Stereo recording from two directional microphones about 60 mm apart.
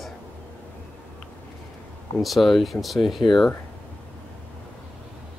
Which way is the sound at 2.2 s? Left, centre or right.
Centre.